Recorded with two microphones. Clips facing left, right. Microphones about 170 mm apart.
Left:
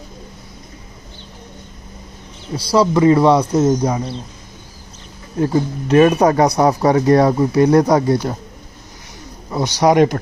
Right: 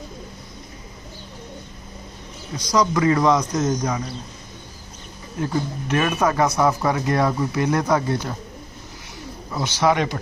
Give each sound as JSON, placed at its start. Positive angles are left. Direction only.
{"t": 2.6, "sound": "speech", "side_deg": 30}
{"t": 5.4, "sound": "speech", "side_deg": 30}
{"t": 9.5, "sound": "a man's voice", "side_deg": 35}
{"t": 9.8, "sound": "speech", "side_deg": 45}